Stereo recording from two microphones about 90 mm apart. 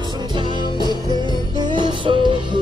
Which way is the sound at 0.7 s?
55° left (ahead or behind).